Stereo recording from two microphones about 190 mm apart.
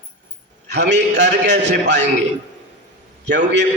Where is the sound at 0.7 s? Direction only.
65° right (ahead or behind).